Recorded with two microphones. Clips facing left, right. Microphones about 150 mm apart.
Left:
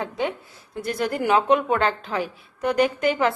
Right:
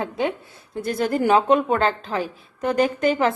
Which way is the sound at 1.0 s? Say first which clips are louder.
Right 3 dB; 40° right (ahead or behind).